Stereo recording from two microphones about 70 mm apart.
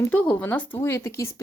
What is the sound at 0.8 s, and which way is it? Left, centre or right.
Speech, left.